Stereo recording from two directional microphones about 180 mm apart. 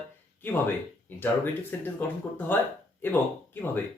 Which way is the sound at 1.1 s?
10° left (ahead or behind).